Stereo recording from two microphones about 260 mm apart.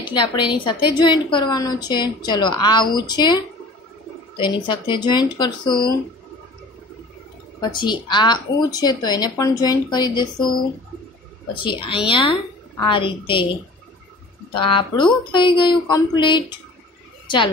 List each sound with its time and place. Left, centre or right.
0.1 s speech: centre
4.4 s speech: centre
7.7 s speech: centre
11.6 s speech: centre
14.5 s speech: centre